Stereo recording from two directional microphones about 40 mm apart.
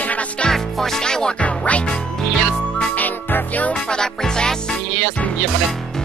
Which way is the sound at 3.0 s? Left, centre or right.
Left.